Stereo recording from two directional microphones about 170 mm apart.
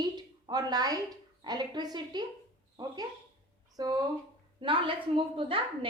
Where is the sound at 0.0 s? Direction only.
25° right (ahead or behind).